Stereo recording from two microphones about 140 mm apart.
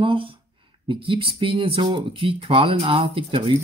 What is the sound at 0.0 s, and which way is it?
Speech, 40° right (ahead or behind).